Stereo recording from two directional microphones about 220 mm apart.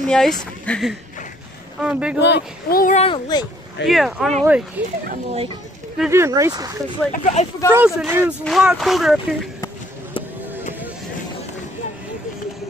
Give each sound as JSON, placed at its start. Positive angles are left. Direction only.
{"t": 0.0, "sound": "speech", "side_deg": 0}
{"t": 2.1, "sound": "speech", "side_deg": 50}
{"t": 3.0, "sound": "speech", "side_deg": 20}
{"t": 3.8, "sound": "speech", "side_deg": 0}
{"t": 5.3, "sound": "speech", "side_deg": -25}
{"t": 5.9, "sound": "speech", "side_deg": -10}
{"t": 7.1, "sound": "speech", "side_deg": 35}
{"t": 7.7, "sound": "speech", "side_deg": -10}